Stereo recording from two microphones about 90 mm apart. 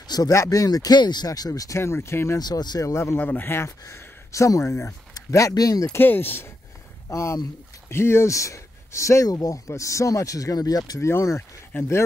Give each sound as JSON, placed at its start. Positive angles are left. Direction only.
{"t": 0.0, "sound": "a sound", "side_deg": 50}
{"t": 0.3, "sound": "speech", "side_deg": 35}
{"t": 2.3, "sound": "speech", "side_deg": 45}
{"t": 2.9, "sound": "speech", "side_deg": 30}
{"t": 3.2, "sound": "speech", "side_deg": 20}
{"t": 5.1, "sound": "speech", "side_deg": 40}
{"t": 5.9, "sound": "speech", "side_deg": 20}
{"t": 7.1, "sound": "speech", "side_deg": 35}